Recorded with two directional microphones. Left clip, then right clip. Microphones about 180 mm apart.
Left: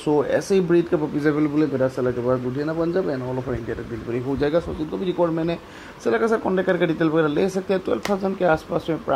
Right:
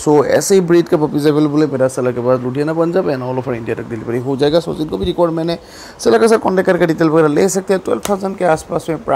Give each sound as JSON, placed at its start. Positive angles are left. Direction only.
{"t": 0.0, "sound": "speech", "side_deg": -25}
{"t": 5.0, "sound": "a man's voice", "side_deg": -45}
{"t": 6.0, "sound": "speech", "side_deg": -30}